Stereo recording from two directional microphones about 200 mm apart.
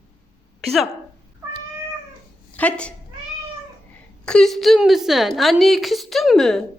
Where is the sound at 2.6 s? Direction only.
5° left (ahead or behind).